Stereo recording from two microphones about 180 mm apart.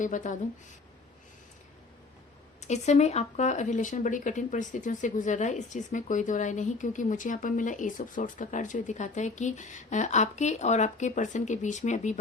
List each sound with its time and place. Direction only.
0.0 s speech: 45° left (ahead or behind)
2.6 s speech: 40° left (ahead or behind)